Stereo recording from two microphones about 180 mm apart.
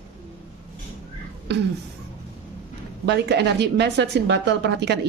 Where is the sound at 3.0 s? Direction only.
70° right (ahead or behind).